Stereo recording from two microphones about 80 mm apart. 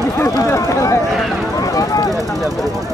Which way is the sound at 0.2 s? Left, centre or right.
Left.